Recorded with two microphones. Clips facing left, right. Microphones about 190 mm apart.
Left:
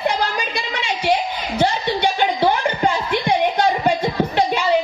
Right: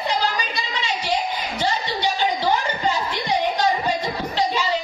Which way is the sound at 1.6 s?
55° left (ahead or behind).